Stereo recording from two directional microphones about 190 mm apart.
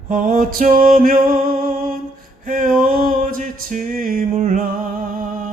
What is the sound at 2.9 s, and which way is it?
Music, 45° right (ahead or behind).